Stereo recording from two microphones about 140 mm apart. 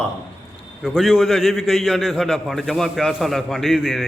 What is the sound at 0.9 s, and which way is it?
A man's voice, 5° right (ahead or behind).